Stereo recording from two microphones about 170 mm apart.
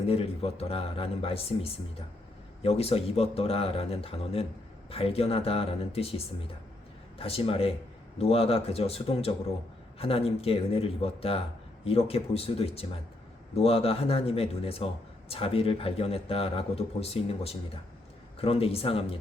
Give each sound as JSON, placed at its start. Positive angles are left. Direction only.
{"t": 0.1, "sound": "a man's voice", "side_deg": 35}